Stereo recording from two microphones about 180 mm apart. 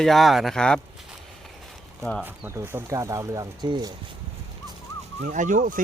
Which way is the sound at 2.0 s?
5° left (ahead or behind).